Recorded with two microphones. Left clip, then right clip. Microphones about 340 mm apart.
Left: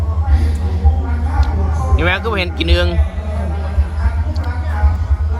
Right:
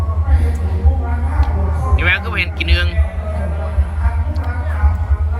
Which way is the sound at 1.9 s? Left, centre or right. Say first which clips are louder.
Even; centre.